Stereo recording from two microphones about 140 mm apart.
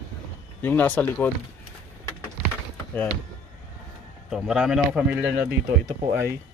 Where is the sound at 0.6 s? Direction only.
15° left (ahead or behind).